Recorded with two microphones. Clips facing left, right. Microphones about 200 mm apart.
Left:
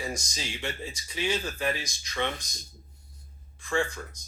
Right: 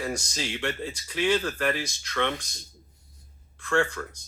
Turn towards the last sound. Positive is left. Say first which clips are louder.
# right 4 dB
turn(degrees=-65)  # may be behind; listen again after turning